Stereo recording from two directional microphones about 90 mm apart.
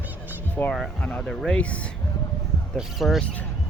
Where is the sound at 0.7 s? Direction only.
10° left (ahead or behind).